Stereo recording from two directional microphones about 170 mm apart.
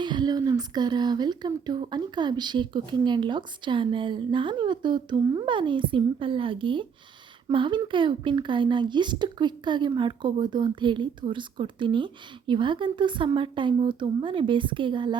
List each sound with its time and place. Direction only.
0.0 s a woman's voice: 25° right (ahead or behind)